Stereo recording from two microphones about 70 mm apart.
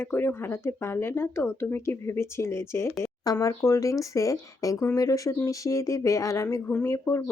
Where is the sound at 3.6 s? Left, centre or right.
Left.